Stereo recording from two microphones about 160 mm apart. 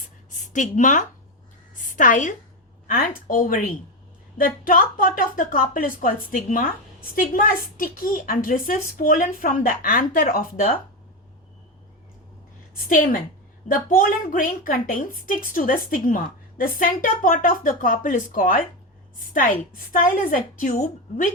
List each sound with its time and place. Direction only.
0.3 s a woman's voice: 50° left (ahead or behind)
1.7 s a sound: 55° left (ahead or behind)
2.8 s a woman's voice: 65° left (ahead or behind)
12.7 s a woman's voice: 60° left (ahead or behind)